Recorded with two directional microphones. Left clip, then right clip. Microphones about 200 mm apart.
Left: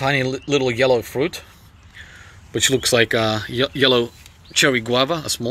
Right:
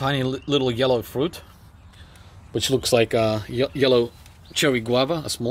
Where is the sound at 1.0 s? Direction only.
15° left (ahead or behind).